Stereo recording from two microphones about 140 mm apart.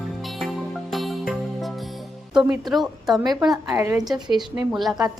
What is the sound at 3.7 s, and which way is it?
Speech, 25° right (ahead or behind).